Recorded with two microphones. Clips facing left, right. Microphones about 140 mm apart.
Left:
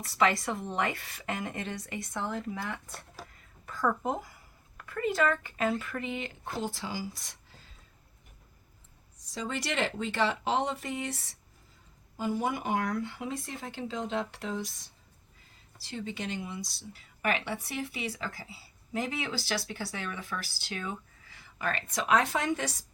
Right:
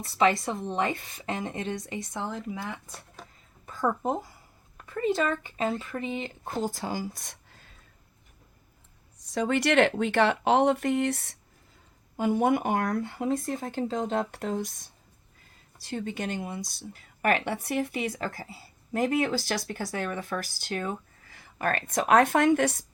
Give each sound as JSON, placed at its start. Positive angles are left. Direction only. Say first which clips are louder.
{"t": 0.2, "sound": "speech", "louder": "right 3 dB", "side_deg": -25}
{"t": 2.7, "sound": "speech", "louder": "even", "side_deg": 0}
{"t": 3.7, "sound": "speech", "louder": "right 2 dB", "side_deg": -25}
{"t": 6.6, "sound": "speech", "louder": "right 5 dB", "side_deg": -45}
{"t": 9.3, "sound": "a woman's voice", "louder": "right 10 dB", "side_deg": -55}